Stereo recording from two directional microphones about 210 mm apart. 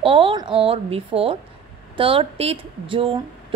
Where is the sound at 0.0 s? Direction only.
25° right (ahead or behind).